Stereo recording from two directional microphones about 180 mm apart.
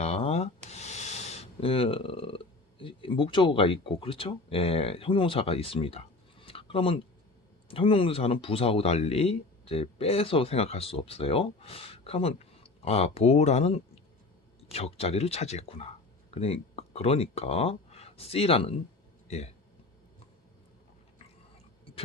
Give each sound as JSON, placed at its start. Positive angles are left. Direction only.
{"t": 0.0, "sound": "speech", "side_deg": 35}
{"t": 6.4, "sound": "a sound", "side_deg": 30}
{"t": 7.7, "sound": "speech", "side_deg": 30}